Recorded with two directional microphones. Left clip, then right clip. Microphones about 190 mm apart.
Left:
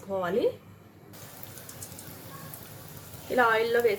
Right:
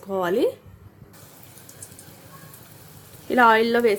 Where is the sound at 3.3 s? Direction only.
65° right (ahead or behind).